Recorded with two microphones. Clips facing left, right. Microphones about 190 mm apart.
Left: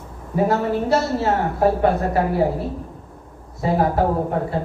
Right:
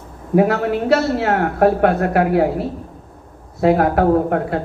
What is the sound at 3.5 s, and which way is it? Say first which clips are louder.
Speech: right 5 dB; 70° right (ahead or behind).